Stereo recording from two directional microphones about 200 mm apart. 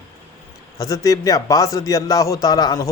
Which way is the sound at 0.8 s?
15° left (ahead or behind).